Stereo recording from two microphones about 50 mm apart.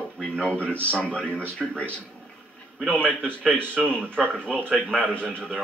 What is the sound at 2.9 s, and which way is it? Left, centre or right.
Speech, left.